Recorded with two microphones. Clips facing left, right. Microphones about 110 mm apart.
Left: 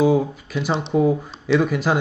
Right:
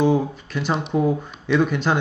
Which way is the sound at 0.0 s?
5° left (ahead or behind).